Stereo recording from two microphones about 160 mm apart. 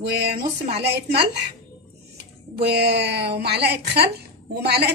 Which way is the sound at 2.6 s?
90° right.